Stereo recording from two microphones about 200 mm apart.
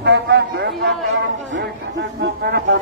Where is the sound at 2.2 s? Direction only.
55° right (ahead or behind).